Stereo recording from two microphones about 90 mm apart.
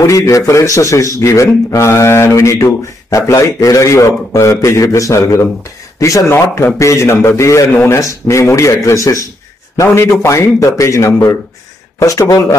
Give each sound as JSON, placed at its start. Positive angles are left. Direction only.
{"t": 0.0, "sound": "a man's voice", "side_deg": 35}
{"t": 7.7, "sound": "a man's voice", "side_deg": 20}
{"t": 8.0, "sound": "a man's voice", "side_deg": 35}
{"t": 10.2, "sound": "a man's voice", "side_deg": 35}